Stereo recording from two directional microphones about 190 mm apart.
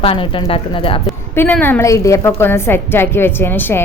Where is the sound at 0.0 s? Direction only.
30° left (ahead or behind).